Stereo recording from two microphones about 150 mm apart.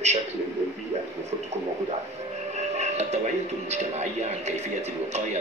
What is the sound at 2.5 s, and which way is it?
Speech, 50° right (ahead or behind).